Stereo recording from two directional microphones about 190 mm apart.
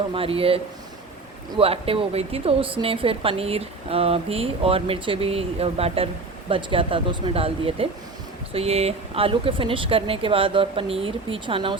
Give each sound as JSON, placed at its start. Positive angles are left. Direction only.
{"t": 0.1, "sound": "a woman's voice", "side_deg": -30}